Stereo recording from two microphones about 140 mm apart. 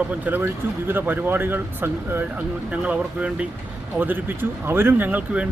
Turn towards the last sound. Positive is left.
turn(degrees=-10)  # may be behind; listen again after turning